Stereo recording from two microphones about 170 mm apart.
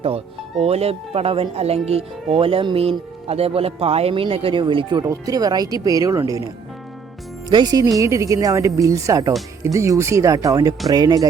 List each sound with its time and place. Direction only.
0.6 s speech: 35° right (ahead or behind); by 6.5 s 20° right (ahead or behind)
7.5 s speech: 20° right (ahead or behind)